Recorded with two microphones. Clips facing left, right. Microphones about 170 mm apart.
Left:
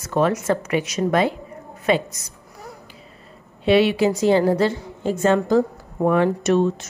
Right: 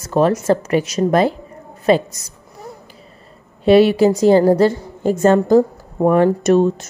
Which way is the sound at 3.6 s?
40° right (ahead or behind).